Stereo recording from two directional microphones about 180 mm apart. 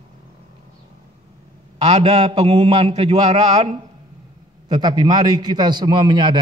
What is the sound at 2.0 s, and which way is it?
A man's voice, 35° right (ahead or behind).